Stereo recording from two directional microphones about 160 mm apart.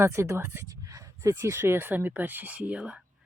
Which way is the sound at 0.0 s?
15° right (ahead or behind).